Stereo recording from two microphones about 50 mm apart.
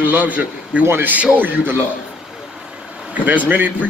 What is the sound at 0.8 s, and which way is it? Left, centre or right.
A man's voice, right.